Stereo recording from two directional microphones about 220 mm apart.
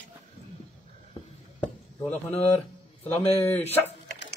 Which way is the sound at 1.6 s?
5° left (ahead or behind).